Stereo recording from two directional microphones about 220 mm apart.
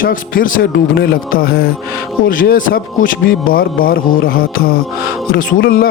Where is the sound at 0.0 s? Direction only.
40° left (ahead or behind).